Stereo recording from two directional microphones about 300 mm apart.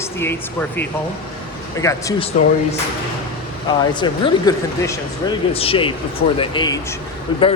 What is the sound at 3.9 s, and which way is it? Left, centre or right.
A man's voice, centre.